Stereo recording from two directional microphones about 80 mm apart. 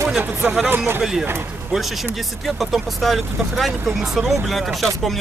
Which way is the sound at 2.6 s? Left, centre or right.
Centre.